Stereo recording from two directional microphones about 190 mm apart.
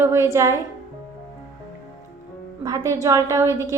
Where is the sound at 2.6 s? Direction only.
20° right (ahead or behind).